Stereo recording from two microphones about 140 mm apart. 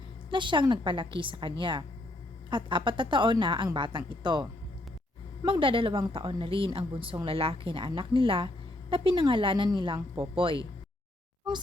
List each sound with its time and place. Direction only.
0.3 s a woman's voice: 35° right (ahead or behind)
5.5 s a woman's voice: 40° right (ahead or behind)